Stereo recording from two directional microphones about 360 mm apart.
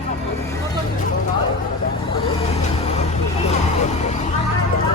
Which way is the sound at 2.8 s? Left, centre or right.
Centre.